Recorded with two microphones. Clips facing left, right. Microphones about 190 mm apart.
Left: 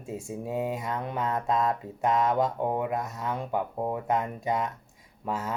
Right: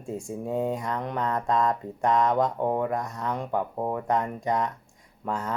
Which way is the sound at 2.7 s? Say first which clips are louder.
Right 2 dB; 20° left (ahead or behind).